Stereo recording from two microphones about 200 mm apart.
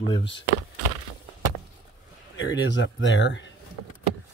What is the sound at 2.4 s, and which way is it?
Speech, 65° left (ahead or behind).